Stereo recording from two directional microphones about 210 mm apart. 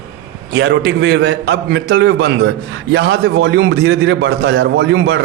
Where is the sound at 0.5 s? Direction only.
50° right (ahead or behind).